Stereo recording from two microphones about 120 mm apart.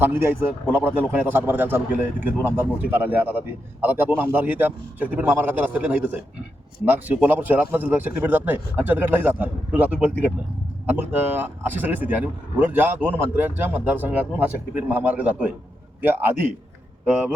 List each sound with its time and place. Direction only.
0.0 s a man's voice: 20° right (ahead or behind)
11.1 s a man's voice: 15° right (ahead or behind)